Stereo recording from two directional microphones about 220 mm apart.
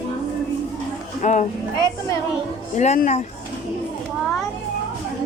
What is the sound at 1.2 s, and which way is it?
Speech, 35° left (ahead or behind).